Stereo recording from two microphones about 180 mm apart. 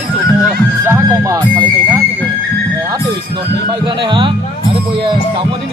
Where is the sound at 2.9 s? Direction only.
30° right (ahead or behind).